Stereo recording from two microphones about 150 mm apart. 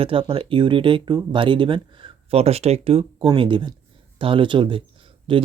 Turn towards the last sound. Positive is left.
turn(degrees=-35)  # may be behind; listen again after turning